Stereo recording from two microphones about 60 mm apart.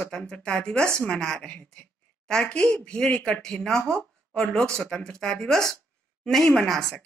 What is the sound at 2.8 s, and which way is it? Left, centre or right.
Speech, centre.